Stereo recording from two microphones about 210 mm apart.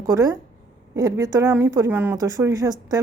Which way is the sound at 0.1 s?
15° right (ahead or behind).